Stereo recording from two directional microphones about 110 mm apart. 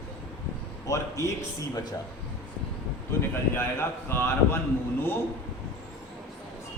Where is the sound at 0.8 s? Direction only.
30° left (ahead or behind).